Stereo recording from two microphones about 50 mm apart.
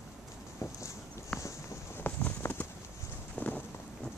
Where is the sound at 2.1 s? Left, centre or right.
Left.